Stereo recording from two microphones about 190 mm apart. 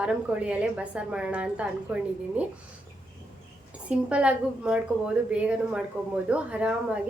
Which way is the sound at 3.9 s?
5° right (ahead or behind).